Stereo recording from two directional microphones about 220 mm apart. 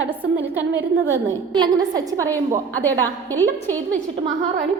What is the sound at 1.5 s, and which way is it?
Speech, 20° right (ahead or behind).